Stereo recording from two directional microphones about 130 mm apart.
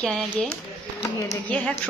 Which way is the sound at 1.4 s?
10° left (ahead or behind).